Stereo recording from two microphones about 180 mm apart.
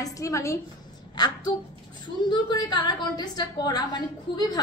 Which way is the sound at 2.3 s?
25° left (ahead or behind).